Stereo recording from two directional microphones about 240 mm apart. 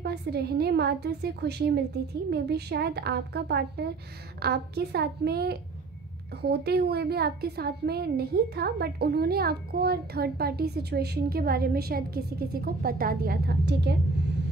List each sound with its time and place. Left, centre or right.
0.0 s a woman's voice: right